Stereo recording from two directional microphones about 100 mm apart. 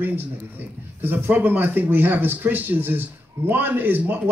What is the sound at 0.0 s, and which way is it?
Speech, 20° right (ahead or behind).